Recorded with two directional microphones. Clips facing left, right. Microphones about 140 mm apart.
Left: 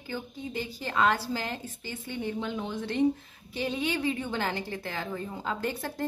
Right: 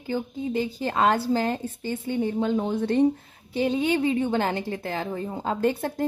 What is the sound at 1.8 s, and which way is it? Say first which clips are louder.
A woman's voice: right 9 dB; 45° right (ahead or behind).